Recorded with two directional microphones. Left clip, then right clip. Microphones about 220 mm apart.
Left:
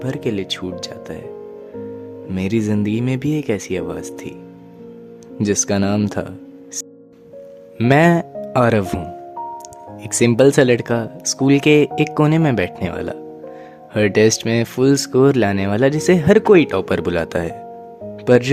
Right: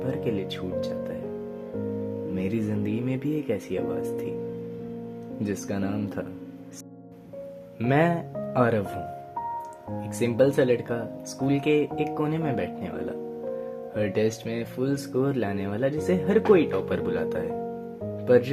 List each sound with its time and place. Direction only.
0.0 s speech: 40° left (ahead or behind)
2.3 s speech: 40° left (ahead or behind)
5.4 s speech: 40° left (ahead or behind)
7.8 s speech: 40° left (ahead or behind)
10.2 s speech: 45° left (ahead or behind)